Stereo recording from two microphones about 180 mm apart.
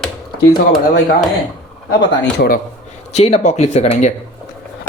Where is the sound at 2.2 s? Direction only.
65° left (ahead or behind).